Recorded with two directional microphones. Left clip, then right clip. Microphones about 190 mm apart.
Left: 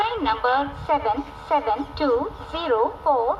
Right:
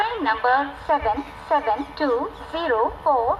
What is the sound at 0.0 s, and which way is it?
A woman's voice, 25° left (ahead or behind).